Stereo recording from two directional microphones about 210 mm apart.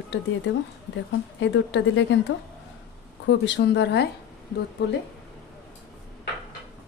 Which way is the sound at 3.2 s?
60° left (ahead or behind).